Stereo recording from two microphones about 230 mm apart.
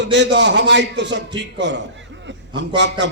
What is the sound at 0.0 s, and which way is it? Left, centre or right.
A man's voice, right.